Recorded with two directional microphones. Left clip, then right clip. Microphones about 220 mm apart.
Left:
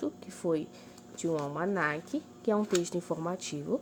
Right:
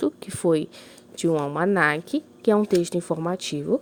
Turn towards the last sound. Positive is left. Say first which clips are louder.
# right 9 dB
turn(degrees=-35)  # may be behind; listen again after turning